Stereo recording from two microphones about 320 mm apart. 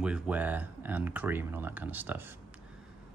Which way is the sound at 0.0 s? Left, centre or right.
Centre.